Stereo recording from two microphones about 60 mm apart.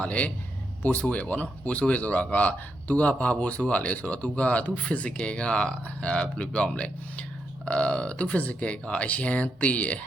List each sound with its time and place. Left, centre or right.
0.0 s speech: left